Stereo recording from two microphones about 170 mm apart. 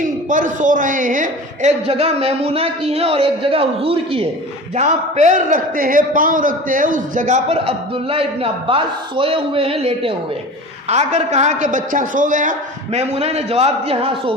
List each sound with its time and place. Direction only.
0.0 s a man's voice: 50° right (ahead or behind); by 14.3 s 35° right (ahead or behind)